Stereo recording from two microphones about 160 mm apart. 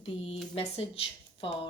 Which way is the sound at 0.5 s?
40° left (ahead or behind).